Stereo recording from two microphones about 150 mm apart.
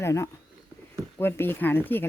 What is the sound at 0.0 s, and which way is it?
Speech, 20° left (ahead or behind).